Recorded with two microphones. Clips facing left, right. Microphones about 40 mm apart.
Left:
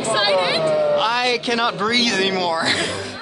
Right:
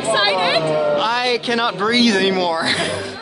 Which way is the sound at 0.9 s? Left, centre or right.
Centre.